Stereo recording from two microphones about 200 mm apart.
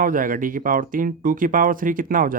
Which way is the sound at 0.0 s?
45° right (ahead or behind).